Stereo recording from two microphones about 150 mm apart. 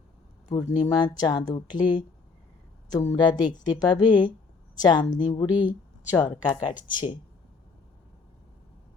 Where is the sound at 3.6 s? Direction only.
25° left (ahead or behind).